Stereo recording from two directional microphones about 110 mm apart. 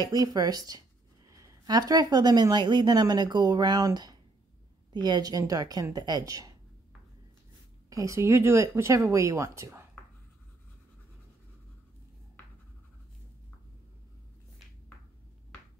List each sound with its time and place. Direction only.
0.0 s a woman's voice: 35° right (ahead or behind)
7.9 s speech: 30° right (ahead or behind)